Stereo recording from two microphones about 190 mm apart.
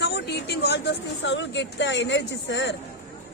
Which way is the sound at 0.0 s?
60° left (ahead or behind).